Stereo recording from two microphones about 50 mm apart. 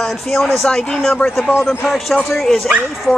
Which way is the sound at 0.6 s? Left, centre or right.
Centre.